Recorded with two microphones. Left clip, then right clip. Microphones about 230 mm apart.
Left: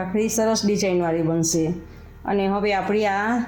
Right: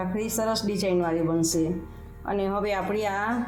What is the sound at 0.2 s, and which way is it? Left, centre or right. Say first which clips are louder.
Speech: left 7 dB; left.